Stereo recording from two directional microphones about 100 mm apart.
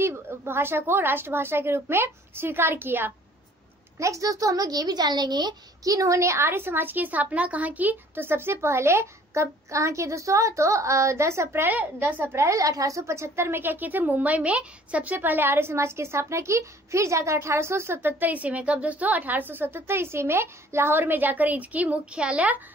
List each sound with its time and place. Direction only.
0.0 s a child's voice: 25° right (ahead or behind)
4.0 s a child's voice: 35° right (ahead or behind); by 22.6 s 15° right (ahead or behind)